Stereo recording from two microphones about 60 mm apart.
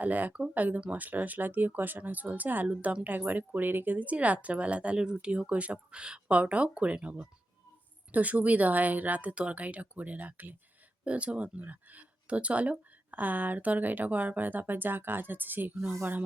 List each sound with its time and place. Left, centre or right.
0.0 s speech: right